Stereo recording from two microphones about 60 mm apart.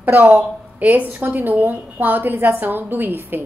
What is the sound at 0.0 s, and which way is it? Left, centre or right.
A woman's voice, right.